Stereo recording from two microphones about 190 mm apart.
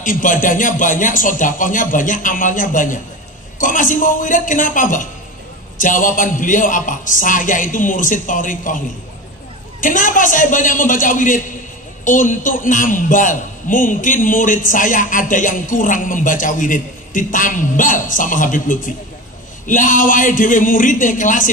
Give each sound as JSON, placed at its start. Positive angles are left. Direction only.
{"t": 0.0, "sound": "a man's voice", "side_deg": 45}